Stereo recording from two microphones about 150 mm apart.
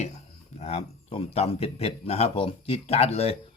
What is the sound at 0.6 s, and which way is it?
Speech, 45° left (ahead or behind).